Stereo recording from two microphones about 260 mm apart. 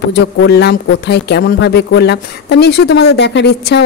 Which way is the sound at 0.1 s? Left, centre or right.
Left.